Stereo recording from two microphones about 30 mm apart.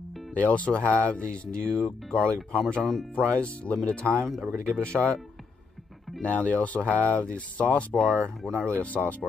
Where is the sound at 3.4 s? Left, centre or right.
Left.